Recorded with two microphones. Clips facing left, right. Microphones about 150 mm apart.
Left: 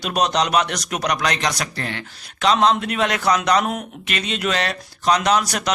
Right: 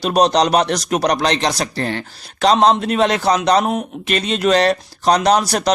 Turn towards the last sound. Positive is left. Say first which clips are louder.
# right 4 dB
turn(degrees=-35)  # may be behind; listen again after turning